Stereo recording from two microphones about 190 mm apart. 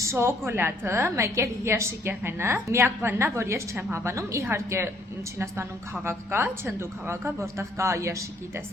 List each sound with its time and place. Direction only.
0.0 s a woman's voice: 15° right (ahead or behind)